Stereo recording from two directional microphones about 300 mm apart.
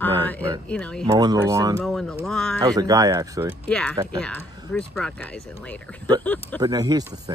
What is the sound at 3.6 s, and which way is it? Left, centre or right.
Speech, centre.